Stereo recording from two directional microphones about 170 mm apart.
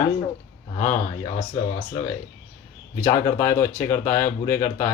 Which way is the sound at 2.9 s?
15° left (ahead or behind).